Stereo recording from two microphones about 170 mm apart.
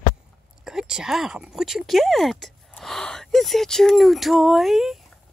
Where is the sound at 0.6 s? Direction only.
5° right (ahead or behind).